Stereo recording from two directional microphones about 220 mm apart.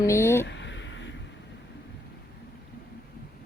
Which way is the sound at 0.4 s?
55° left (ahead or behind).